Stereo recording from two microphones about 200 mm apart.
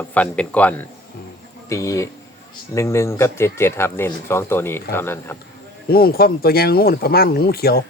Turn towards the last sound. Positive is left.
turn(degrees=50)  # may be behind; listen again after turning